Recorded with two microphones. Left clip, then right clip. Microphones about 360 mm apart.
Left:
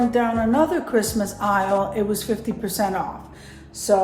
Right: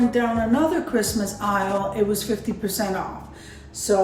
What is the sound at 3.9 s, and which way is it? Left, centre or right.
Speech, centre.